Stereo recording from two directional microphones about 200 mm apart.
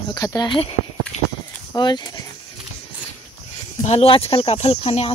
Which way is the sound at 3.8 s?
30° left (ahead or behind).